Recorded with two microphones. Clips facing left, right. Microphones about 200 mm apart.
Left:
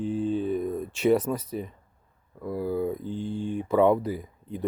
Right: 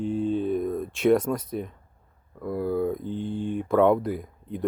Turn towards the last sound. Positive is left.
turn(degrees=0)  # may be behind; listen again after turning